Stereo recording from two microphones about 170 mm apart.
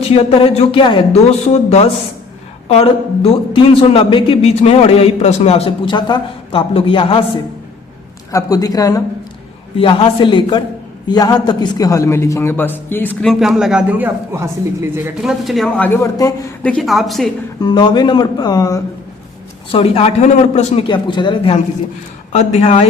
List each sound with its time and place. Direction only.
0.0 s a man's voice: 35° left (ahead or behind)
8.3 s speech: 20° left (ahead or behind)
9.7 s a man's voice: 35° left (ahead or behind); by 13.3 s 10° left (ahead or behind)
13.4 s speech: centre (ahead or behind)
16.2 s speech: 20° left (ahead or behind)
16.6 s speech: centre (ahead or behind)
17.6 s speech: 25° left (ahead or behind)
19.7 s a man's voice: 35° left (ahead or behind)
22.3 s a man's voice: 40° left (ahead or behind)